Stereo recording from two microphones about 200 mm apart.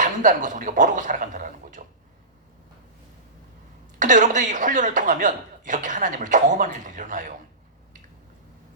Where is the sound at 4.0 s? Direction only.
40° right (ahead or behind).